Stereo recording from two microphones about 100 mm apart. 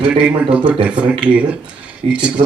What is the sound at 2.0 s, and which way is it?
Speech, 90° right.